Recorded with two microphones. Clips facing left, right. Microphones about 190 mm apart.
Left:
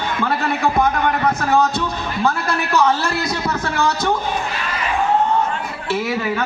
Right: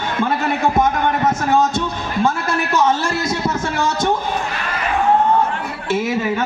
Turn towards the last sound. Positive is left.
turn(degrees=-20)  # may be behind; listen again after turning